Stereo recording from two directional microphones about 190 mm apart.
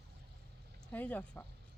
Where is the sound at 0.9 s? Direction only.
10° left (ahead or behind).